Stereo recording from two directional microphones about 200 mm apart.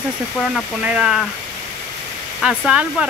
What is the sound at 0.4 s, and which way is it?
Speech, 5° right (ahead or behind).